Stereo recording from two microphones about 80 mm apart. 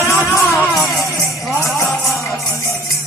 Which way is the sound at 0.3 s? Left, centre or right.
Left.